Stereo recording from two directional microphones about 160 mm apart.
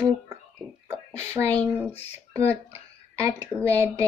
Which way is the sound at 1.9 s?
40° left (ahead or behind).